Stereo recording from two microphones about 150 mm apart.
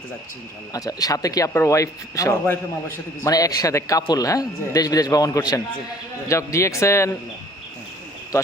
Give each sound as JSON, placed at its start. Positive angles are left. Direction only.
{"t": 0.7, "sound": "speech", "side_deg": 25}